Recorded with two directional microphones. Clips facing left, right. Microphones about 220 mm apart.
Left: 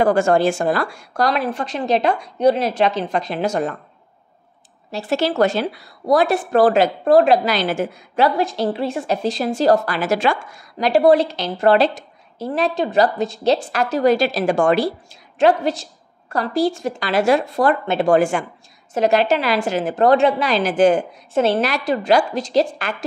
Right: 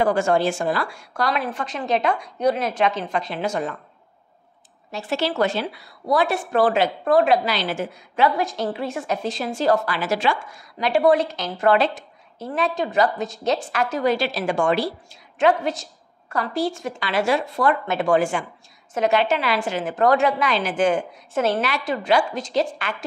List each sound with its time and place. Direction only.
0.0 s a woman's voice: 45° left (ahead or behind)
4.9 s a woman's voice: 40° left (ahead or behind)
8.4 s a woman's voice: 30° left (ahead or behind); by 15.0 s 50° left (ahead or behind)
15.3 s a woman's voice: 35° left (ahead or behind)
18.1 s a woman's voice: 45° left (ahead or behind)